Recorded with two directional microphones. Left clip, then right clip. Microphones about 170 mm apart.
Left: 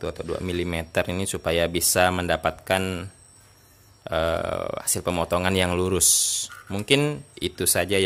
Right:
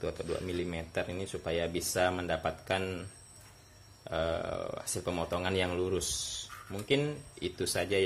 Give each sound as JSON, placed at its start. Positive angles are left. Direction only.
{"t": 0.0, "sound": "speech", "side_deg": 35}